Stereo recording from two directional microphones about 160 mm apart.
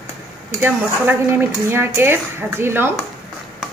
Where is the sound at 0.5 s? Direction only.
15° right (ahead or behind).